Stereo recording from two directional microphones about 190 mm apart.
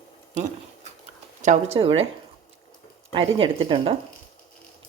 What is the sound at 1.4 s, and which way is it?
Speech, 35° right (ahead or behind).